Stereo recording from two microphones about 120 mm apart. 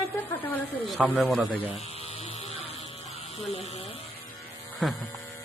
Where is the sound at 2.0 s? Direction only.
55° left (ahead or behind).